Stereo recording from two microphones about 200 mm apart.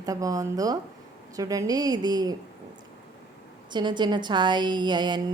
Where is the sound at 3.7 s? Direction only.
20° right (ahead or behind).